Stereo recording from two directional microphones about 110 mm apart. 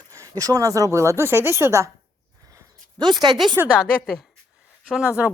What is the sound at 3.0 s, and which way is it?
Speech, 40° right (ahead or behind).